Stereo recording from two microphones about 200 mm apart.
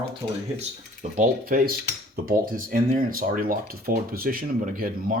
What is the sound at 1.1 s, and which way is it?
Speech, 40° right (ahead or behind).